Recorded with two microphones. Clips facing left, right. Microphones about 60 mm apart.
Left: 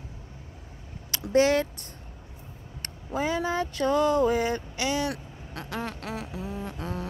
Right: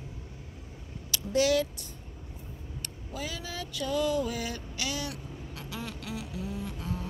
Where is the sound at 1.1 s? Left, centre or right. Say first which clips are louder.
Left 4 dB; left.